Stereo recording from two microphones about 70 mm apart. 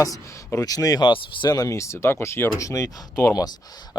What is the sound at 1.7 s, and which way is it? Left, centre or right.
Speech, left.